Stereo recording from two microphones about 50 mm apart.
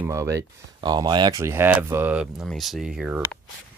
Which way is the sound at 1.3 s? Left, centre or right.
Right.